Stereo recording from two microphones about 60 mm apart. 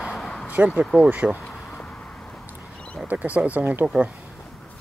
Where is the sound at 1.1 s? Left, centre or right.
Right.